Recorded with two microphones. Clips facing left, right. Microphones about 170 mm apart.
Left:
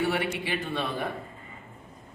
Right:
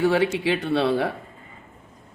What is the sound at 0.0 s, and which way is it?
A man's voice, 90° right.